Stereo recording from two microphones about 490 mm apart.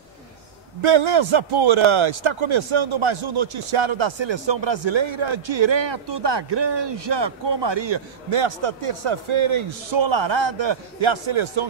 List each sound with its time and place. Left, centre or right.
0.8 s a man's voice: right